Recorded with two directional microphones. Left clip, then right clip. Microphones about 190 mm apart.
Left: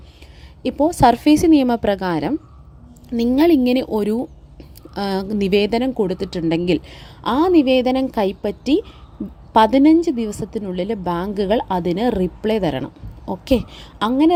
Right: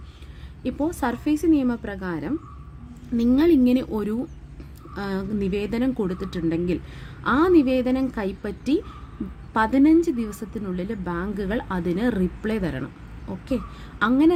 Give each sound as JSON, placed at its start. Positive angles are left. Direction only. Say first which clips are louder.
{"t": 0.6, "sound": "a woman's voice", "louder": "left 11 dB", "side_deg": 30}
{"t": 3.3, "sound": "a woman's voice", "louder": "left 4 dB", "side_deg": 30}